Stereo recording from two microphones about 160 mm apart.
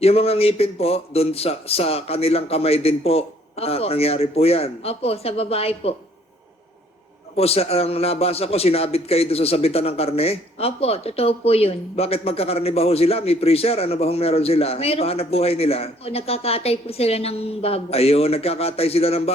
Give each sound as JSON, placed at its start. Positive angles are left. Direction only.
{"t": 0.0, "sound": "a man's voice", "side_deg": 40}
{"t": 7.3, "sound": "a man's voice", "side_deg": 40}